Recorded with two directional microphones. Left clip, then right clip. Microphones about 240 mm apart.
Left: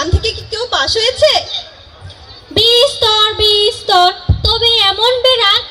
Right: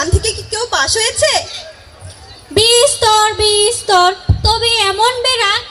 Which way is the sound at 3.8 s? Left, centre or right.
Left.